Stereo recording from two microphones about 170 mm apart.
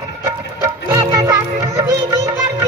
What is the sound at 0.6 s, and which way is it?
Music, 20° right (ahead or behind).